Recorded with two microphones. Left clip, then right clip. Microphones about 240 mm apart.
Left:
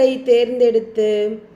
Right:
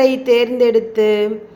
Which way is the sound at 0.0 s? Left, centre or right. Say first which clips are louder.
Right 1 dB; centre.